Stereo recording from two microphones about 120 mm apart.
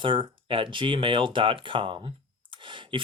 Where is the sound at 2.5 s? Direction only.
45° right (ahead or behind).